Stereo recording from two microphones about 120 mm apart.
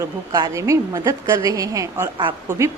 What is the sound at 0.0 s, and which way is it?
A woman's voice, 30° right (ahead or behind).